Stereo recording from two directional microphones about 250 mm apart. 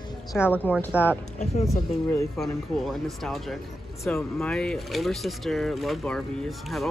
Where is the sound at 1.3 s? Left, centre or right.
Left.